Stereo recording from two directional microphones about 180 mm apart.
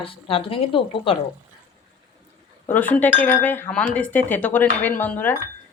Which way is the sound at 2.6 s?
10° left (ahead or behind).